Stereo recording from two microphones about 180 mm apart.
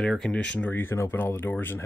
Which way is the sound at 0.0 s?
5° left (ahead or behind).